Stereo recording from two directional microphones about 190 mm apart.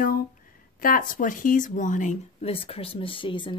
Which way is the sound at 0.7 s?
45° left (ahead or behind).